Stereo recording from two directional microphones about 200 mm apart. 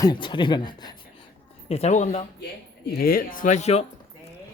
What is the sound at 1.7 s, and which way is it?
Speech, 35° left (ahead or behind).